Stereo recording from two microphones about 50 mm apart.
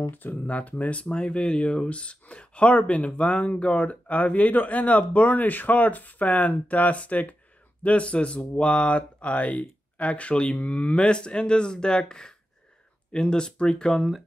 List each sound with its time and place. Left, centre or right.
0.1 s speech: left; by 14.0 s centre